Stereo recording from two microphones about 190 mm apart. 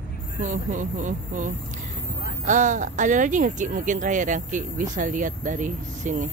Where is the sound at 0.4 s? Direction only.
40° right (ahead or behind).